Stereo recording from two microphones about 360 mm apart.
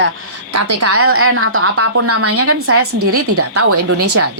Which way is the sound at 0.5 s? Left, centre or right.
Right.